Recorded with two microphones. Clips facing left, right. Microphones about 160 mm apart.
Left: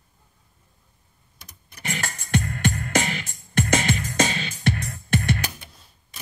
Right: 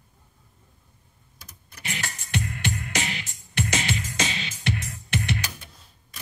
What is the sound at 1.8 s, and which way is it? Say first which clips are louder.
Music: left 4 dB; 50° left (ahead or behind).